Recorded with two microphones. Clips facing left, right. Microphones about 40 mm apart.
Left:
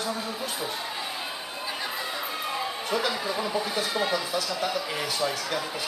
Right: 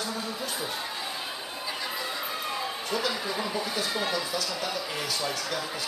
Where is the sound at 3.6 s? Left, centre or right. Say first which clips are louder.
Left 2 dB; centre.